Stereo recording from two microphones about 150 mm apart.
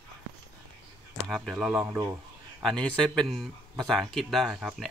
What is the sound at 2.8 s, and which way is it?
Speech, 5° left (ahead or behind).